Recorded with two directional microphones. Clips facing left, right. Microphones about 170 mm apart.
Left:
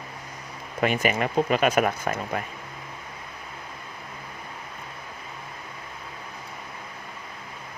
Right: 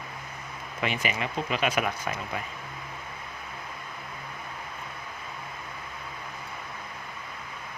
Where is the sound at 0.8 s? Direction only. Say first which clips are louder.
Left 7 dB; 50° left (ahead or behind).